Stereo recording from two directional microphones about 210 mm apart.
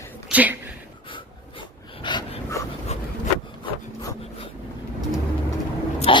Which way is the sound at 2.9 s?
30° left (ahead or behind).